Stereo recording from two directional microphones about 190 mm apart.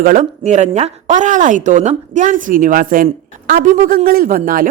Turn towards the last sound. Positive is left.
turn(degrees=-50)  # may be behind; listen again after turning